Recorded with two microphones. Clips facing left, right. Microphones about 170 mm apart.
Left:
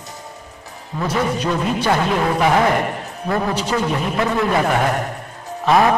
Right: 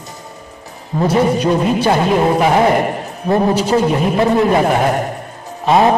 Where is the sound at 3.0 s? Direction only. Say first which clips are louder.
Right 6 dB; 25° right (ahead or behind).